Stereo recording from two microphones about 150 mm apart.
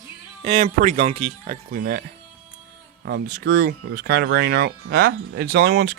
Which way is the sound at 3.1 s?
80° right.